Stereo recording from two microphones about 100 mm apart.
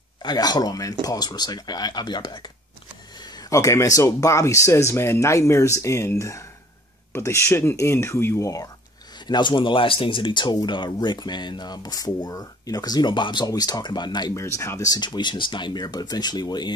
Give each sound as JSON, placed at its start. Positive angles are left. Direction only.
{"t": 0.2, "sound": "speech", "side_deg": 45}
{"t": 9.3, "sound": "speech", "side_deg": 55}
{"t": 14.3, "sound": "speech", "side_deg": 30}